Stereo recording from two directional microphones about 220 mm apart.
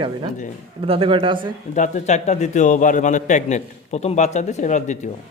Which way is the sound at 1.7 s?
30° left (ahead or behind).